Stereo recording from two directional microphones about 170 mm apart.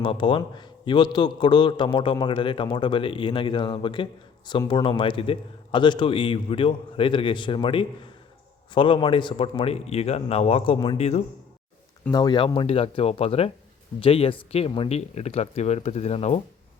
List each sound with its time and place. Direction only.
0.0 s a man's voice: 30° left (ahead or behind)
12.1 s a man's voice: 25° left (ahead or behind)